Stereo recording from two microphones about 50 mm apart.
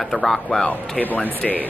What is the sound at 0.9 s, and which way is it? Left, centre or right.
Speech, left.